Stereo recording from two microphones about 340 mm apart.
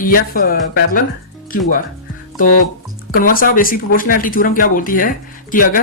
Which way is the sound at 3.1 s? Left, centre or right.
Left.